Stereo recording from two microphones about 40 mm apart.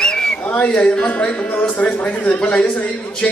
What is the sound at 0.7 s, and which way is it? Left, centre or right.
Speech, left.